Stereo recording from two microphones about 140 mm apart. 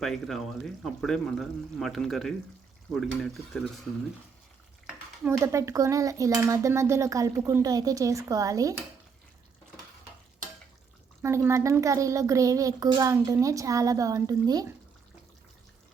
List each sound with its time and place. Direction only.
0.0 s speech: centre (ahead or behind)
5.2 s dishes: 20° right (ahead or behind)
11.2 s dishes: 20° right (ahead or behind)